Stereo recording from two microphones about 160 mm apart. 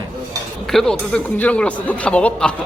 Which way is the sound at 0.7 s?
5° left (ahead or behind).